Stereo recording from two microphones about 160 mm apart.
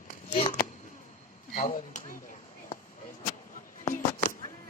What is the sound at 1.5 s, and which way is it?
Chop, 50° left (ahead or behind).